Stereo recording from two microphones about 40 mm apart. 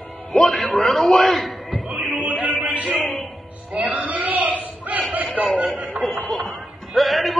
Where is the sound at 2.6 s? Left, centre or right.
Right.